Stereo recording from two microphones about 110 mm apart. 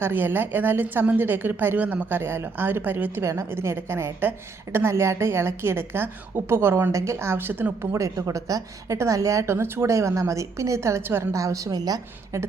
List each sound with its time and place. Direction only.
0.0 s a woman's voice: 20° right (ahead or behind)